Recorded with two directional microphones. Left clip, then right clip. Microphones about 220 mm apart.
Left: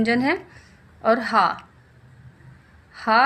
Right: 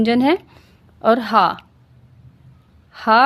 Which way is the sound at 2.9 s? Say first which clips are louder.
Right 4 dB; 40° right (ahead or behind).